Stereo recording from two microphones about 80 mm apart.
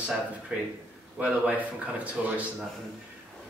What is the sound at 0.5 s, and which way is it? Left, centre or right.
Speech, centre.